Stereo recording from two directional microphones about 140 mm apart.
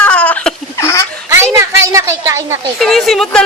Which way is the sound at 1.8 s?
20° right (ahead or behind).